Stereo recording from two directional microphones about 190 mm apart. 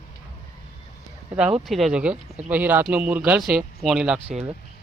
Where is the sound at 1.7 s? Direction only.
Centre (ahead or behind).